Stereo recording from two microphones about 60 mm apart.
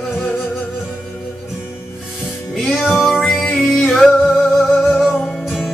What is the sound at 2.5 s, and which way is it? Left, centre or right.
Music, centre.